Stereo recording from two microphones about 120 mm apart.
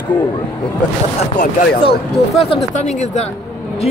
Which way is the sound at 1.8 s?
50° left (ahead or behind).